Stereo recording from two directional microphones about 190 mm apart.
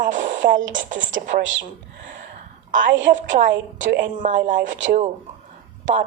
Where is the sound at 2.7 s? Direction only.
45° right (ahead or behind).